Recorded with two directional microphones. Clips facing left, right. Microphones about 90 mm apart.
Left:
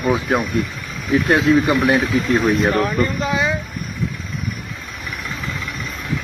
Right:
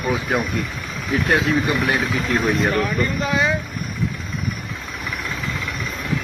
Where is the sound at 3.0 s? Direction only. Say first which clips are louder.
Left 1 dB; 25° left (ahead or behind).